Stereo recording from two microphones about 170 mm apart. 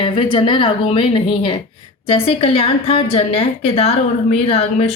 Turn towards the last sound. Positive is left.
turn(degrees=35)  # may be behind; listen again after turning